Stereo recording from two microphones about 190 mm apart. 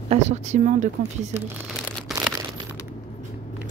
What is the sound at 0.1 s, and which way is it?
Speech, 35° right (ahead or behind).